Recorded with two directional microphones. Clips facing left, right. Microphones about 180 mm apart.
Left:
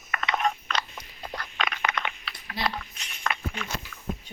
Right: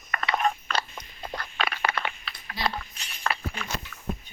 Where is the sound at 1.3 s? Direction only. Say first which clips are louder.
Right 1 dB; 30° right (ahead or behind).